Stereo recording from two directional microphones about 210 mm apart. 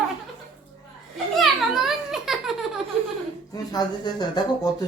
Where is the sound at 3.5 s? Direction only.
20° left (ahead or behind).